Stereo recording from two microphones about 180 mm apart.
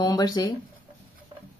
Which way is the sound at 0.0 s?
20° left (ahead or behind).